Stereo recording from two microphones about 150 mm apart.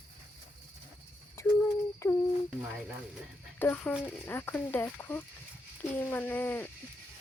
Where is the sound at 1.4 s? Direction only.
20° left (ahead or behind).